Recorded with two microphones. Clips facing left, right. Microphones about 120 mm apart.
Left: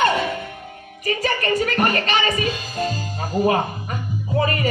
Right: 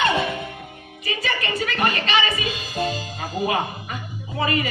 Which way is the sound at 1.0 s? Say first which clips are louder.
Left 5 dB; 45° left (ahead or behind).